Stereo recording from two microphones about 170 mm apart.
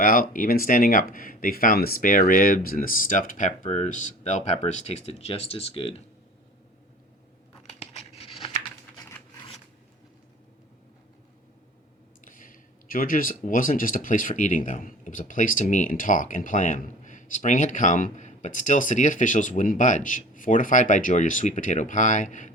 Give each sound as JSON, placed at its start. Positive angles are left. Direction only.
{"t": 0.0, "sound": "speech", "side_deg": 55}
{"t": 7.7, "sound": "tearing", "side_deg": 35}
{"t": 9.0, "sound": "a sound", "side_deg": 15}
{"t": 12.2, "sound": "speech", "side_deg": 50}